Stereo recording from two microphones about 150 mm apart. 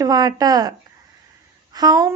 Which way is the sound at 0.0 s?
25° right (ahead or behind).